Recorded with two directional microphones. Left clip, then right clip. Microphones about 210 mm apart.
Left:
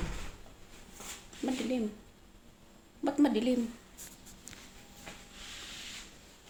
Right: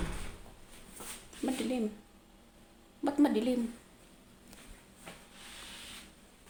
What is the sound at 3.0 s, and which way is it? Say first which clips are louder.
Speech: even; centre (ahead or behind).